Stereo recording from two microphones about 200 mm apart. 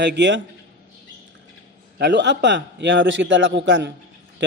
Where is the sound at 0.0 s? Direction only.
60° right (ahead or behind).